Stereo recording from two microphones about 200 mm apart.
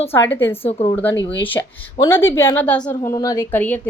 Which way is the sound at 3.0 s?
15° left (ahead or behind).